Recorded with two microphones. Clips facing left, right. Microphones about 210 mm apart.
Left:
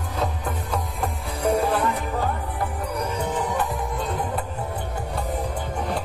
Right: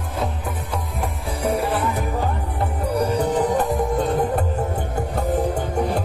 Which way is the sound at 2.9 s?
30° right (ahead or behind).